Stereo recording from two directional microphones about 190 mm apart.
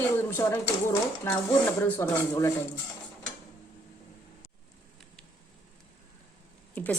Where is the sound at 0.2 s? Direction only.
10° left (ahead or behind).